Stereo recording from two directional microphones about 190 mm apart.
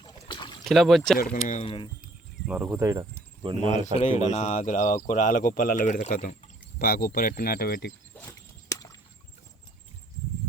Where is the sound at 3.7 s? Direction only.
35° left (ahead or behind).